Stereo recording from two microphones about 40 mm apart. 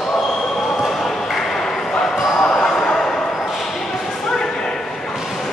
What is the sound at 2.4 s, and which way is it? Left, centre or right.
Basketball bounce, left.